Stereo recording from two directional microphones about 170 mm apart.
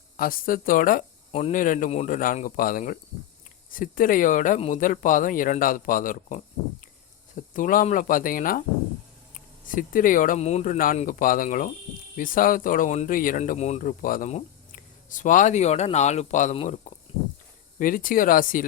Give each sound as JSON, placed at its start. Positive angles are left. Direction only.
{"t": 0.2, "sound": "speech", "side_deg": 55}
{"t": 1.3, "sound": "speech", "side_deg": 40}
{"t": 17.7, "sound": "speech", "side_deg": 55}